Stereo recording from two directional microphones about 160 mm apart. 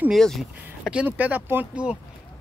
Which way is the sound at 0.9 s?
10° right (ahead or behind).